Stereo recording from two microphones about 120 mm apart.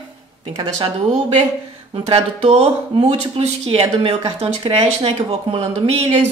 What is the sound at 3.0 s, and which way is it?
A woman's voice, 50° right (ahead or behind).